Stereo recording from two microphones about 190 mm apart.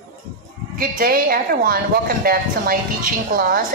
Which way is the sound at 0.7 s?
50° right (ahead or behind).